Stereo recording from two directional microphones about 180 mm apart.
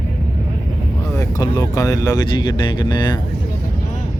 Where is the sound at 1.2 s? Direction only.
15° left (ahead or behind).